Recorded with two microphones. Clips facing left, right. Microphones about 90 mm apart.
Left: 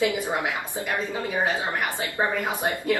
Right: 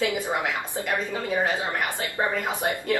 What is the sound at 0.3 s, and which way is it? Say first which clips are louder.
Speech: even; 20° left (ahead or behind).